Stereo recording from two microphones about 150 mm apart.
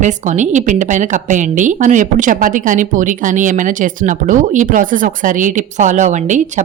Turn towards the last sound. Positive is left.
turn(degrees=-55)  # may be behind; listen again after turning